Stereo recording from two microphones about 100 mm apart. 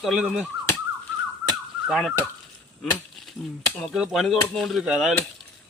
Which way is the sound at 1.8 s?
5° right (ahead or behind).